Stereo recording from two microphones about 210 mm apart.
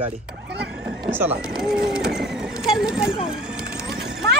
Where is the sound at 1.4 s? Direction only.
Centre (ahead or behind).